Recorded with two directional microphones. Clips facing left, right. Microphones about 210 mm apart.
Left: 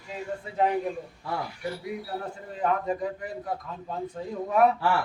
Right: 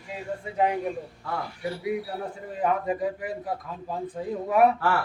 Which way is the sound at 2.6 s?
5° right (ahead or behind).